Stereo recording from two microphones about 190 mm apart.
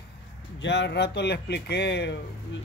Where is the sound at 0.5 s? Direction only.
65° left (ahead or behind).